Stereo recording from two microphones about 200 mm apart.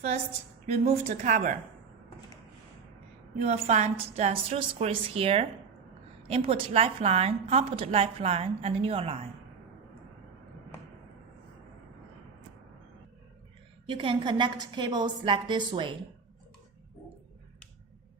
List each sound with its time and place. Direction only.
0.9 s a woman's voice: 35° right (ahead or behind)
3.4 s a woman's voice: 35° right (ahead or behind)
13.8 s a woman's voice: 25° right (ahead or behind)